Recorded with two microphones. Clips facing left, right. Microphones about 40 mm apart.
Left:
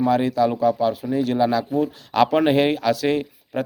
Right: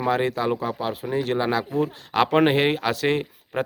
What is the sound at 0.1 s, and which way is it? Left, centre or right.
Speech, right.